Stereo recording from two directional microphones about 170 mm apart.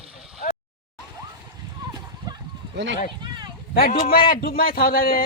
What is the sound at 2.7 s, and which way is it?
Speech, 90° right.